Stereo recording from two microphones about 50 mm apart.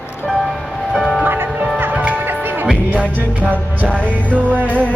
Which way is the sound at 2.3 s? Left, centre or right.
Right.